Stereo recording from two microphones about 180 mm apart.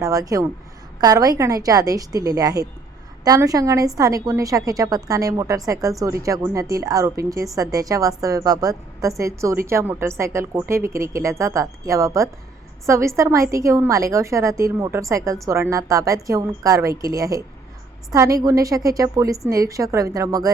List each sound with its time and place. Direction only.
0.0 s a woman's voice: 20° right (ahead or behind)